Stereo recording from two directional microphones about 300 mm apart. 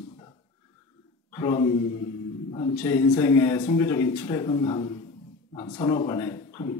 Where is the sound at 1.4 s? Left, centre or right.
Centre.